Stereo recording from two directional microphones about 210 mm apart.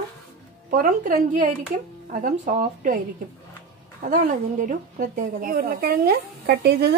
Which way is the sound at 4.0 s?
40° right (ahead or behind).